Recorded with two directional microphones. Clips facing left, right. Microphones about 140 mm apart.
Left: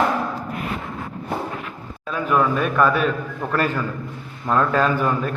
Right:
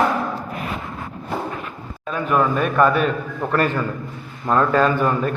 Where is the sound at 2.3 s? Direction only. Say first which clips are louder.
Right 1 dB; 10° right (ahead or behind).